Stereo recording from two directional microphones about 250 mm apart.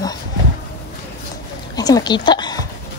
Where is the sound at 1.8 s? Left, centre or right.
Centre.